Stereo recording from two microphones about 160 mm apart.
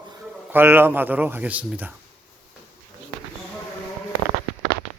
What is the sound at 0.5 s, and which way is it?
A man's voice, 15° right (ahead or behind).